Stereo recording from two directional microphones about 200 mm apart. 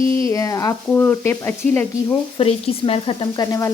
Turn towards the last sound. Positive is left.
turn(degrees=15)  # may be behind; listen again after turning